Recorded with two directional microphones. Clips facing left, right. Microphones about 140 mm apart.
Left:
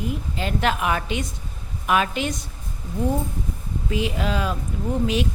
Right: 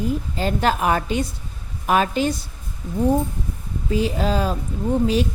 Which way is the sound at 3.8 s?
35° right (ahead or behind).